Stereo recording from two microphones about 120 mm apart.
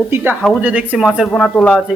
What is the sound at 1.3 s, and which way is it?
Speech, 5° left (ahead or behind).